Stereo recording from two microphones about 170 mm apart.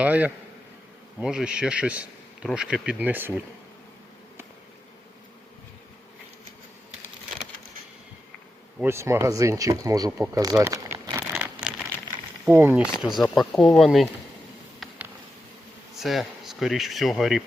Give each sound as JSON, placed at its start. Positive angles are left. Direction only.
{"t": 0.0, "sound": "speech", "side_deg": -10}
{"t": 8.8, "sound": "speech", "side_deg": -15}
{"t": 10.2, "sound": "crumpling", "side_deg": -20}
{"t": 12.5, "sound": "speech", "side_deg": -10}
{"t": 14.8, "sound": "a sound", "side_deg": -10}
{"t": 16.0, "sound": "speech", "side_deg": 0}